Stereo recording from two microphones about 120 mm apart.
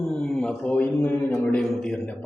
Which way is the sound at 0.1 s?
5° left (ahead or behind).